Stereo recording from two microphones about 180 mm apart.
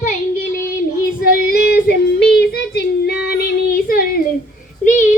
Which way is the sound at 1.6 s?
65° left (ahead or behind).